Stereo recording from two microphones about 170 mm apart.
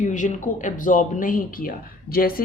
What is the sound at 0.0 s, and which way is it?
A woman's voice, 50° left (ahead or behind).